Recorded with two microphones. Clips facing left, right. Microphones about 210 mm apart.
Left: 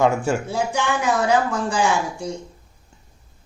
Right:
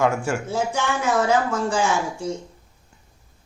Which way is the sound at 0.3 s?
15° left (ahead or behind).